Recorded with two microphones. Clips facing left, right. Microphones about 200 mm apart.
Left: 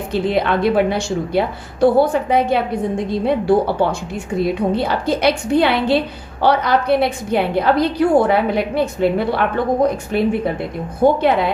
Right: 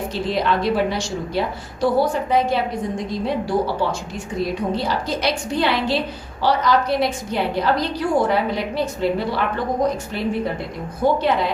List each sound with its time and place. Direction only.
0.1 s a woman's voice: 55° left (ahead or behind)
11.0 s a woman's voice: 55° left (ahead or behind)